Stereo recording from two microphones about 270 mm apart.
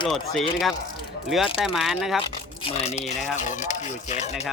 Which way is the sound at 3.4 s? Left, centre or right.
Left.